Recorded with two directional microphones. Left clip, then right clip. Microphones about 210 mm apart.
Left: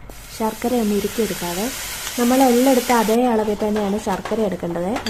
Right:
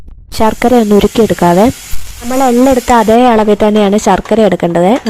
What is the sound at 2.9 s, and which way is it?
Speech, 40° right (ahead or behind).